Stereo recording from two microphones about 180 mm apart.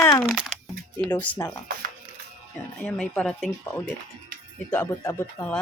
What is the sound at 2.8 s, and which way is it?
Speech, 5° left (ahead or behind).